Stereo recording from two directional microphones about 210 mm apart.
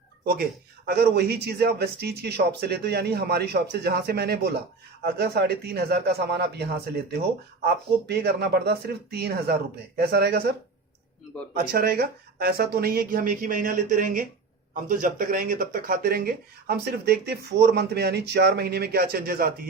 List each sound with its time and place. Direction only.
0.9 s speech: 50° right (ahead or behind)
11.5 s speech: 45° right (ahead or behind)